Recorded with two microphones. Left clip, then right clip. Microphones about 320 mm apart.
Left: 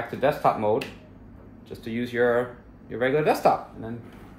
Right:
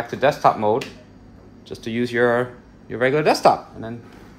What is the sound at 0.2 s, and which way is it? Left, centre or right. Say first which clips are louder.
Speech: right 5 dB; right.